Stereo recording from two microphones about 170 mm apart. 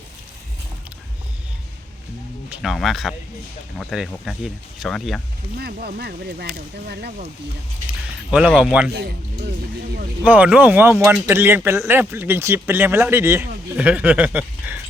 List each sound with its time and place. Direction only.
2.5 s speech: centre (ahead or behind)
5.5 s speech: 70° right (ahead or behind)
8.3 s speech: 5° right (ahead or behind)
8.9 s speech: 65° right (ahead or behind)
10.2 s speech: 10° right (ahead or behind)